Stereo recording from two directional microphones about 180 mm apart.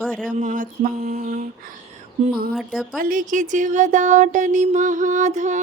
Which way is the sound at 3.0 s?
50° right (ahead or behind).